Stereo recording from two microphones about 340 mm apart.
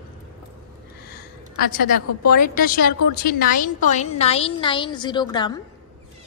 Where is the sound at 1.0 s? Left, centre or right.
Left.